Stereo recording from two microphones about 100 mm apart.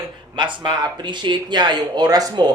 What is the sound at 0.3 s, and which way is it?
Speech, 50° right (ahead or behind).